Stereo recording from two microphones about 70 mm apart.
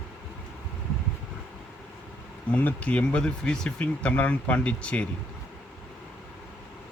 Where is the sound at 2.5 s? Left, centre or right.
Left.